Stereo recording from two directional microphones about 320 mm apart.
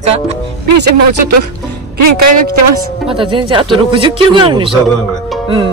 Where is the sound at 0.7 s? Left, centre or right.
Right.